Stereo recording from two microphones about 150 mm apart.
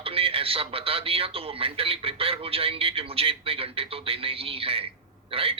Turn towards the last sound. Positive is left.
turn(degrees=-40)  # may be behind; listen again after turning